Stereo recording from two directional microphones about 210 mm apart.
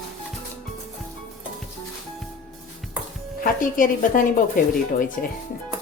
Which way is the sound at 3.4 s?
40° left (ahead or behind).